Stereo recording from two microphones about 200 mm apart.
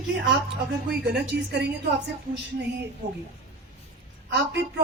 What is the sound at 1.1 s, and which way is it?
Speech, 60° right (ahead or behind).